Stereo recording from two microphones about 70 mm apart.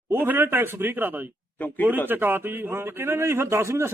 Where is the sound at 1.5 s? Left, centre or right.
Left.